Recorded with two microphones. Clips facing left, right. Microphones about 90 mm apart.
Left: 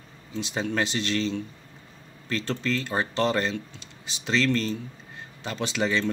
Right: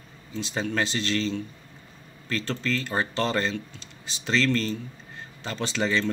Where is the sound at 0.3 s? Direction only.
15° left (ahead or behind).